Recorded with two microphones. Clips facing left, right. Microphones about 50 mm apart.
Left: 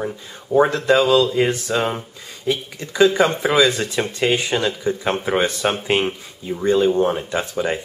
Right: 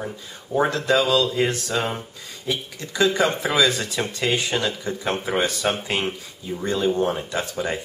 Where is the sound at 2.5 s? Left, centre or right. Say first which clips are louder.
Left 3 dB; left.